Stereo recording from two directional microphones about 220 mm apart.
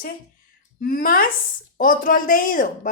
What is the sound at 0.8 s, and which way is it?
A woman's voice, 40° left (ahead or behind).